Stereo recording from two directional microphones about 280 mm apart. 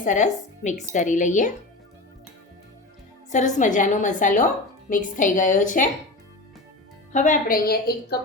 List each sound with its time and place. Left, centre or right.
0.0 s a woman's voice: left
3.2 s a woman's voice: left
7.1 s a woman's voice: left